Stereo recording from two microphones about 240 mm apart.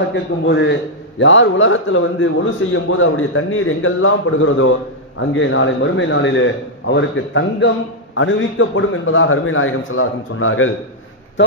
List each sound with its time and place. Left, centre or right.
0.1 s a man's voice: left